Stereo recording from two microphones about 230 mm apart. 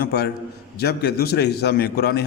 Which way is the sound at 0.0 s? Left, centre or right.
Left.